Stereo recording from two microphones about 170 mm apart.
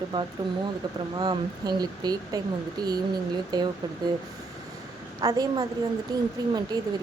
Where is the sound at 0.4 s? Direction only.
20° right (ahead or behind).